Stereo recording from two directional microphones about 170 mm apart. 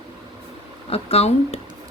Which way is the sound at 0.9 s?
35° left (ahead or behind).